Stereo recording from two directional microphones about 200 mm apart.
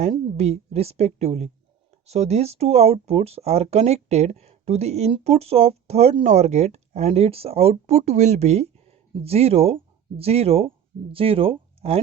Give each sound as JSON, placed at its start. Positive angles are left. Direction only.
{"t": 0.0, "sound": "speech", "side_deg": -35}